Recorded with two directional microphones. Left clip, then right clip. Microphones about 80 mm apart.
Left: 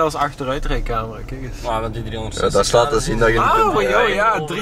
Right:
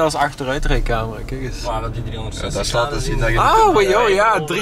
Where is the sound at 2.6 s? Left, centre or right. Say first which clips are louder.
Left 4 dB; left.